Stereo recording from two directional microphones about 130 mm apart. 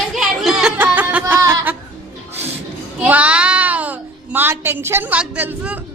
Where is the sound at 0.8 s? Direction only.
15° right (ahead or behind).